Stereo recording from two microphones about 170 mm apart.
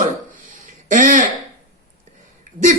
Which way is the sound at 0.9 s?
50° right (ahead or behind).